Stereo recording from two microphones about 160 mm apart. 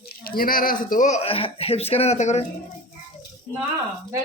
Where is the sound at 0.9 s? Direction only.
50° left (ahead or behind).